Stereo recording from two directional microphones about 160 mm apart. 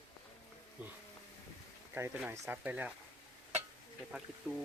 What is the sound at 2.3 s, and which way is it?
Speech, 10° right (ahead or behind).